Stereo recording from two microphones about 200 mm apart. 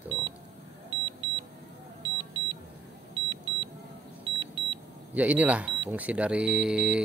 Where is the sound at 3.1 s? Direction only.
25° right (ahead or behind).